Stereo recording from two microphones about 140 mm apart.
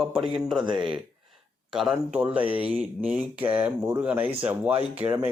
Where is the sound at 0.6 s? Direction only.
35° right (ahead or behind).